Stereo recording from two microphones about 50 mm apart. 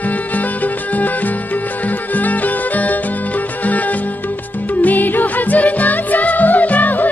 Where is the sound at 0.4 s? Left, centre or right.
Left.